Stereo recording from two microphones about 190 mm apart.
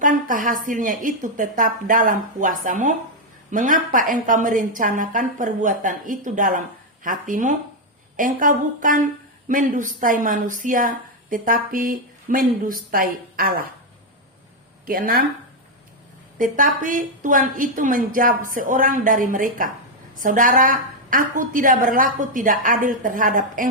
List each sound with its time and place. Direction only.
0.0 s a woman's voice: 45° right (ahead or behind)
14.8 s a woman's voice: 50° right (ahead or behind)
16.4 s a woman's voice: 45° right (ahead or behind)